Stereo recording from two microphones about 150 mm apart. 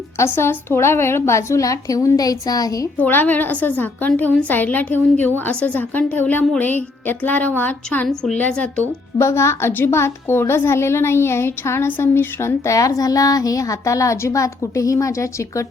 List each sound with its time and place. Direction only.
0.2 s a woman's voice: 15° left (ahead or behind)
3.0 s a woman's voice: 10° left (ahead or behind)
9.1 s a woman's voice: 20° left (ahead or behind)